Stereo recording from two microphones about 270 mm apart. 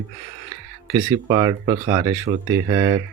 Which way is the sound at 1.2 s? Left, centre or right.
Centre.